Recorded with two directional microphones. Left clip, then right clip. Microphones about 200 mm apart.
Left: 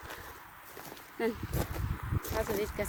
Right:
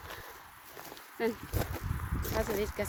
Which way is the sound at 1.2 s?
5° left (ahead or behind).